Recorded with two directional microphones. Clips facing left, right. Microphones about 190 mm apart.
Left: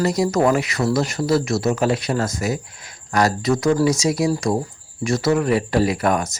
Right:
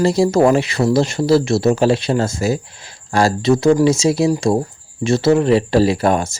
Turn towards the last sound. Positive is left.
turn(degrees=-30)  # may be behind; listen again after turning